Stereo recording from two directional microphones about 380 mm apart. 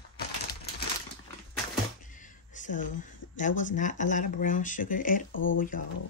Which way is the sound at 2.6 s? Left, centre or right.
Centre.